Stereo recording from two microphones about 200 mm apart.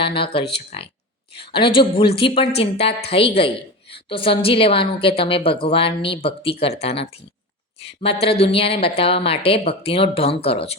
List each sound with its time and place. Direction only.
0.0 s a woman's voice: 25° left (ahead or behind)